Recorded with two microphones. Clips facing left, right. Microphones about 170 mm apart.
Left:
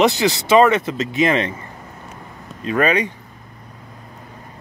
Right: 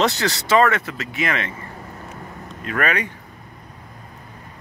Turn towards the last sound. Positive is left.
turn(degrees=20)  # may be behind; listen again after turning